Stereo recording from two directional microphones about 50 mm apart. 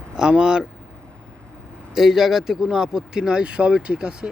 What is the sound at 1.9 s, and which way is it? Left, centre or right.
Speech, centre.